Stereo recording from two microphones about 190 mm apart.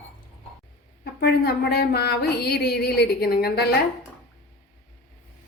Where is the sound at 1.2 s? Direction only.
55° left (ahead or behind).